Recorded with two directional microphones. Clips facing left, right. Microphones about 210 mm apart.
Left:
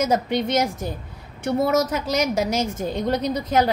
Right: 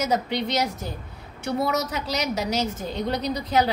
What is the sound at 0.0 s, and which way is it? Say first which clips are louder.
A woman's voice: left 3 dB; 50° left (ahead or behind).